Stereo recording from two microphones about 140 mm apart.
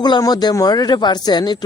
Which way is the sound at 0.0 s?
30° left (ahead or behind).